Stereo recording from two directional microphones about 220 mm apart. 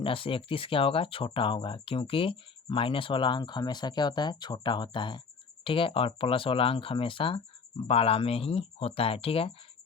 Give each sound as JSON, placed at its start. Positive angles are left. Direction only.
{"t": 0.0, "sound": "speech", "side_deg": 25}